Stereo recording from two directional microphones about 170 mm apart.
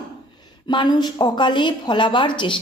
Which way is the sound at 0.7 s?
25° left (ahead or behind).